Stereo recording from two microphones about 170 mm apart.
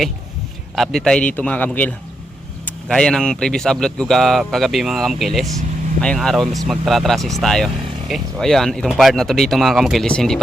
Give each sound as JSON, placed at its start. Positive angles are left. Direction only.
{"t": 0.8, "sound": "a man's voice", "side_deg": 0}